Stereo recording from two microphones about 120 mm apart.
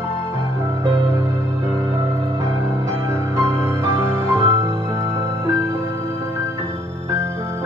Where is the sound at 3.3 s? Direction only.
20° right (ahead or behind).